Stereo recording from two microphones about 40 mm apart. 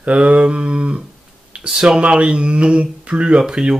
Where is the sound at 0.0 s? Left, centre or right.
Right.